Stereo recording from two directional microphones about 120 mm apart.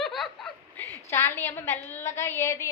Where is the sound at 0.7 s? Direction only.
15° left (ahead or behind).